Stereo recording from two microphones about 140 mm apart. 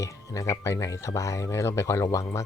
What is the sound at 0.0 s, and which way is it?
Speech, 20° left (ahead or behind).